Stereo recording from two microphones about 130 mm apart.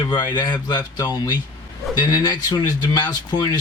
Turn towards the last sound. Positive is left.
turn(degrees=35)  # may be behind; listen again after turning